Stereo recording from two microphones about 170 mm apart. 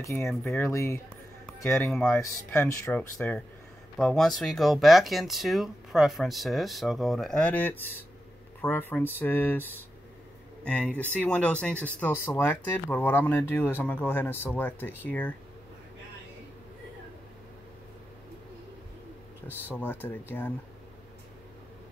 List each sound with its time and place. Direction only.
0.0 s speech: 15° left (ahead or behind)
0.3 s speech: centre (ahead or behind)
0.6 s speech: 15° left (ahead or behind)
1.9 s speech: centre (ahead or behind)
2.1 s speech: 15° left (ahead or behind)
19.7 s speech: 10° left (ahead or behind)